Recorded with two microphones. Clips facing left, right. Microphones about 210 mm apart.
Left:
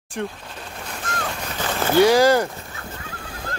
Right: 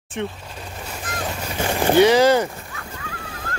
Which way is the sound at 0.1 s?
5° right (ahead or behind).